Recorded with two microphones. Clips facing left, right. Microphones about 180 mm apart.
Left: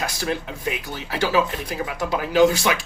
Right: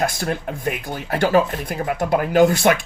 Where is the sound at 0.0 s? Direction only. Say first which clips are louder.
Right 4 dB; 50° right (ahead or behind).